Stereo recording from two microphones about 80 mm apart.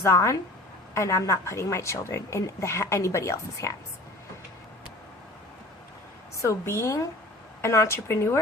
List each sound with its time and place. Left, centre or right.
0.0 s a woman's voice: left
6.4 s a woman's voice: left